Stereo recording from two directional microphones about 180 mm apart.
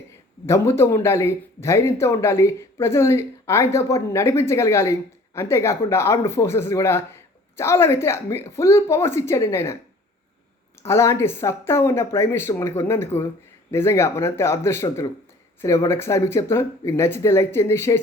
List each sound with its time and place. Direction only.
0.4 s speech: 15° left (ahead or behind)
10.8 s speech: 15° left (ahead or behind)